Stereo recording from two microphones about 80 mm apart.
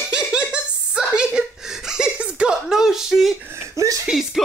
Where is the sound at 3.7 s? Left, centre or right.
Right.